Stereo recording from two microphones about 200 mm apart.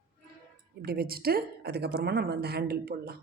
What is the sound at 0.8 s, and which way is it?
A woman's voice, 50° right (ahead or behind).